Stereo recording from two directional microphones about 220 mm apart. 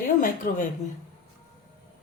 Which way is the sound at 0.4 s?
40° left (ahead or behind).